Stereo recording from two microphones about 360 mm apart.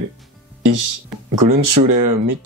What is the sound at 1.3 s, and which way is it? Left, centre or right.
Speech, right.